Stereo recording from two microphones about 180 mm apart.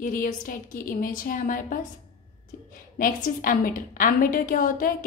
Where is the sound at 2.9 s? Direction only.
50° left (ahead or behind).